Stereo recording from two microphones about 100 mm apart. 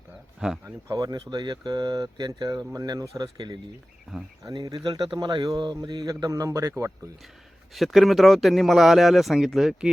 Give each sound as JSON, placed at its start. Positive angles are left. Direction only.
{"t": 0.3, "sound": "speech", "side_deg": -5}
{"t": 0.6, "sound": "speech", "side_deg": -35}
{"t": 4.1, "sound": "speech", "side_deg": 0}
{"t": 4.4, "sound": "speech", "side_deg": -40}
{"t": 7.7, "sound": "speech", "side_deg": 0}